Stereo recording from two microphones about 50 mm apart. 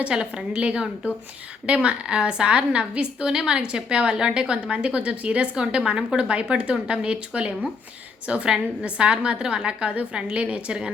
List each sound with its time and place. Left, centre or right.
0.0 s a woman's voice: centre